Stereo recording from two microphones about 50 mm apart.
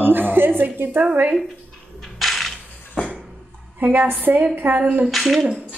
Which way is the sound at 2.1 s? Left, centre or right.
Centre.